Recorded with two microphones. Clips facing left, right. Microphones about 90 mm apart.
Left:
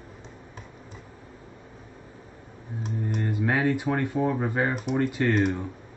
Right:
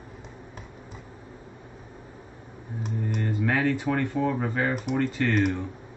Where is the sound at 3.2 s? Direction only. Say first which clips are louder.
Even; 15° left (ahead or behind).